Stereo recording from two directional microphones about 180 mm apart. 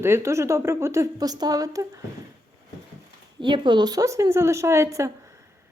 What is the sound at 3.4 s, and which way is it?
Speech, 25° right (ahead or behind).